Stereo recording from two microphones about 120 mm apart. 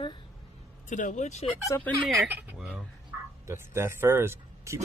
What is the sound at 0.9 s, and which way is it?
Speech, 90° left.